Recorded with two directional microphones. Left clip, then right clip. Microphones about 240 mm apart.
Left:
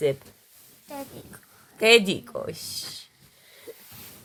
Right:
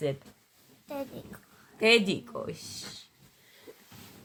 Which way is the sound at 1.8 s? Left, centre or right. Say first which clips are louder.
Left 5 dB; left.